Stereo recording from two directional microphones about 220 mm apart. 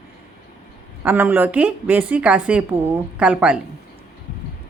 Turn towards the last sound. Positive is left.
turn(degrees=-5)  # may be behind; listen again after turning